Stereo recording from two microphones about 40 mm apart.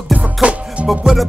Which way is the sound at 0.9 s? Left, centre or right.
Centre.